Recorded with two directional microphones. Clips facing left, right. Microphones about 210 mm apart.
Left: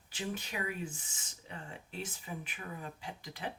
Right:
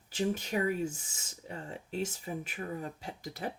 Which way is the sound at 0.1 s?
45° right (ahead or behind).